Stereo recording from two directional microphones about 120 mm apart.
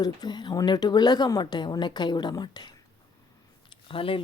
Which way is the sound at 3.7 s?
45° left (ahead or behind).